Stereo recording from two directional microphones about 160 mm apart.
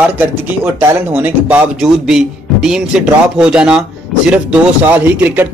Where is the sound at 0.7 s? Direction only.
10° right (ahead or behind).